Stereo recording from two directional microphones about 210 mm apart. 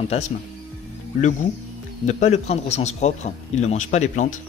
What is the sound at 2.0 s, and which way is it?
Speech, 35° left (ahead or behind).